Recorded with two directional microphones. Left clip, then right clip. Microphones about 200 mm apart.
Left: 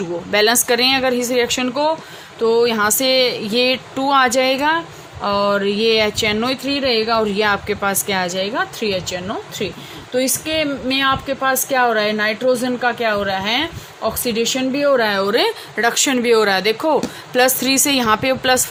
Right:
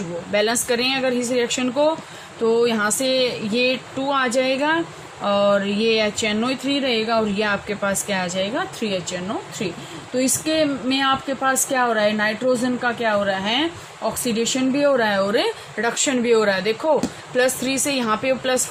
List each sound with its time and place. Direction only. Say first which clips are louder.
0.3 s a woman's voice: left 5 dB; 55° left (ahead or behind)